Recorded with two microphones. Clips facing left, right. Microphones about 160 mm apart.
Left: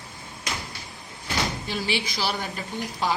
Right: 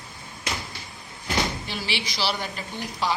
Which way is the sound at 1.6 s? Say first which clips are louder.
Left 3 dB; 45° left (ahead or behind).